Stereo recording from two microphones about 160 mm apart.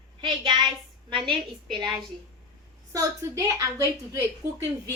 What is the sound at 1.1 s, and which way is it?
Speech, 30° right (ahead or behind).